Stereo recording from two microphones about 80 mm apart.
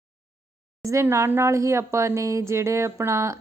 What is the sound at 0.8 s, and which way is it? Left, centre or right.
A woman's voice, right.